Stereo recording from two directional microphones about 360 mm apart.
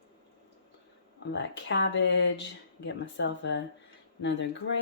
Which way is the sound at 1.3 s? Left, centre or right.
Left.